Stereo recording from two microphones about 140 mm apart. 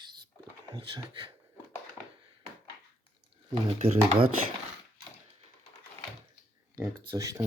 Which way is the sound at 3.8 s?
45° right (ahead or behind).